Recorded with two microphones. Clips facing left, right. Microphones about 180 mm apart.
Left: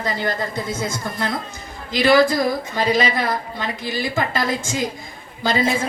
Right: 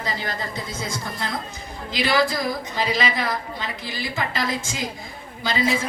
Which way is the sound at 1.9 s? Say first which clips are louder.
Left 7 dB; 50° left (ahead or behind).